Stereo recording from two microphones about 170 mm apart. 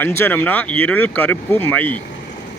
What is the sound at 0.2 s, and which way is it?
Speech, 10° left (ahead or behind).